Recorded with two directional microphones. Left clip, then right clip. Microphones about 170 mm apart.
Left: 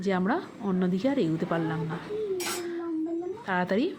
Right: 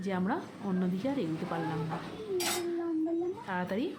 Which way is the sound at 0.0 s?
25° left (ahead or behind).